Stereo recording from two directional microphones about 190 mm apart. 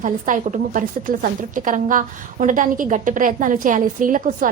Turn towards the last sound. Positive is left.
turn(degrees=-45)  # may be behind; listen again after turning